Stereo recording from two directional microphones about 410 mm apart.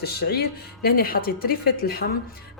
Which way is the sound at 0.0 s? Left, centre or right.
Left.